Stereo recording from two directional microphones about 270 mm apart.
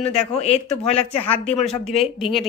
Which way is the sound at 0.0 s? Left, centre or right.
Left.